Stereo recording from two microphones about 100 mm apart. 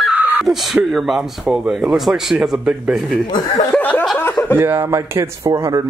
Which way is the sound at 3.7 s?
15° left (ahead or behind).